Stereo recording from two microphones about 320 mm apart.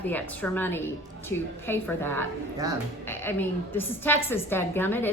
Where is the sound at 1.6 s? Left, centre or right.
Centre.